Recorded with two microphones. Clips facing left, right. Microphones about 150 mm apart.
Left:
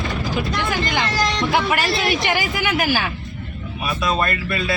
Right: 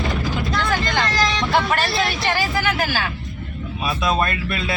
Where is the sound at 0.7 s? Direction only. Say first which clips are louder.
Right 1 dB; 15° left (ahead or behind).